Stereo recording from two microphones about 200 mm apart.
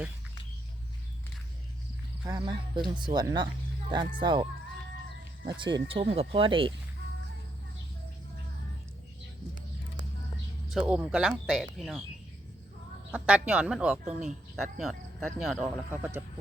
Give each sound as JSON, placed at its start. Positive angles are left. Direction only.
{"t": 2.2, "sound": "speech", "side_deg": -20}
{"t": 5.5, "sound": "speech", "side_deg": -20}
{"t": 10.7, "sound": "speech", "side_deg": -5}
{"t": 13.1, "sound": "speech", "side_deg": -5}
{"t": 14.0, "sound": "speech", "side_deg": -35}
{"t": 14.3, "sound": "speech", "side_deg": 0}